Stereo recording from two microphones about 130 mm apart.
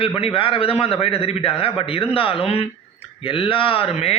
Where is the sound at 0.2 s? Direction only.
45° left (ahead or behind).